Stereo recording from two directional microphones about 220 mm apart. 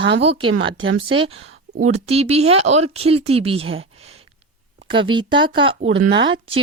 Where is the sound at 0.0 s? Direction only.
50° right (ahead or behind).